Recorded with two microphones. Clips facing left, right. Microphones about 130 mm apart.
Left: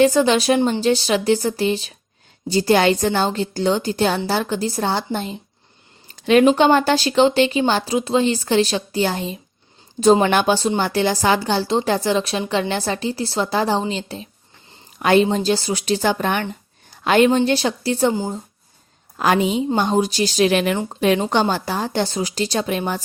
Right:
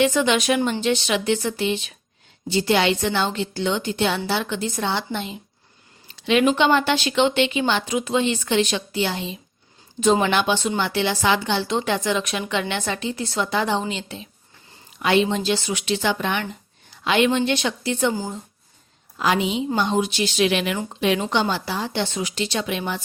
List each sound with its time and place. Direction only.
0.0 s a woman's voice: 35° left (ahead or behind)
18.1 s speech: 20° left (ahead or behind)
19.1 s a woman's voice: 45° left (ahead or behind)